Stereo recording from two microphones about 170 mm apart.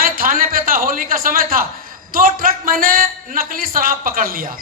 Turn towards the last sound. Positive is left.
turn(degrees=-55)  # may be behind; listen again after turning